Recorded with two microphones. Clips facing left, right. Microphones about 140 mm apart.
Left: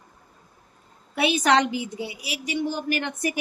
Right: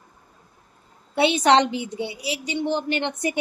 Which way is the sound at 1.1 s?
30° right (ahead or behind).